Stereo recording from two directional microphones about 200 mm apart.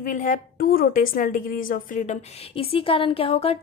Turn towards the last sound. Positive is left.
turn(degrees=30)  # may be behind; listen again after turning